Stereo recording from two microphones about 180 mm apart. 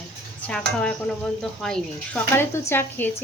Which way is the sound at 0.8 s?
5° left (ahead or behind).